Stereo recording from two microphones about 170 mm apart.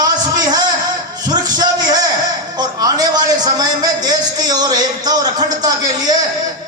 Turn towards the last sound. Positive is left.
turn(degrees=-25)  # may be behind; listen again after turning